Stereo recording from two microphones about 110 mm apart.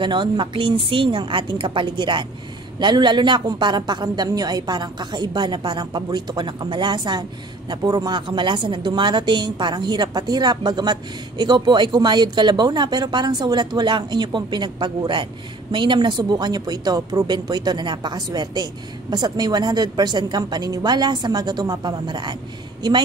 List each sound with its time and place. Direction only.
0.0 s a woman's voice: 45° right (ahead or behind)